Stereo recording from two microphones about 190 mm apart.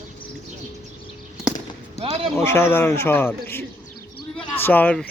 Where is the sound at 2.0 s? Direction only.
30° right (ahead or behind).